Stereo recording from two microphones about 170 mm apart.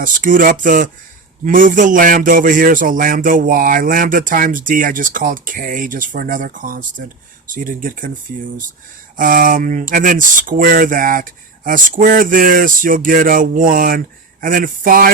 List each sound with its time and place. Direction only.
0.0 s a man's voice: 50° right (ahead or behind)
9.1 s a man's voice: 50° right (ahead or behind)